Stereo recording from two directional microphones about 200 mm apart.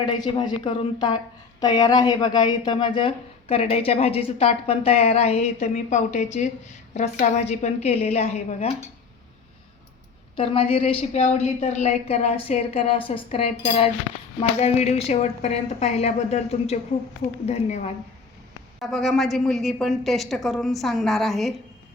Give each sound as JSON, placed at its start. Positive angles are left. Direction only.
{"t": 0.0, "sound": "a woman's voice", "side_deg": 25}
{"t": 10.3, "sound": "a woman's voice", "side_deg": 25}
{"t": 18.8, "sound": "a woman's voice", "side_deg": 0}